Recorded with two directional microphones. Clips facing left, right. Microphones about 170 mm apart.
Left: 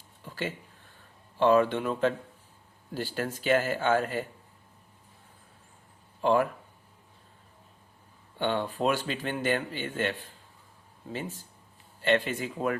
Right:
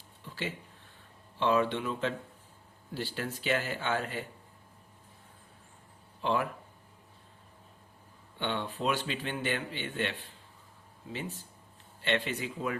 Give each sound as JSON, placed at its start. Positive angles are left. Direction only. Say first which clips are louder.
{"t": 0.2, "sound": "a sound", "louder": "left 3 dB", "side_deg": 45}
{"t": 1.4, "sound": "speech", "louder": "left 5 dB", "side_deg": 45}
{"t": 6.2, "sound": "speech", "louder": "left 6 dB", "side_deg": 45}
{"t": 8.4, "sound": "speech", "louder": "left 5 dB", "side_deg": 45}
{"t": 12.0, "sound": "speech", "louder": "left 5 dB", "side_deg": 45}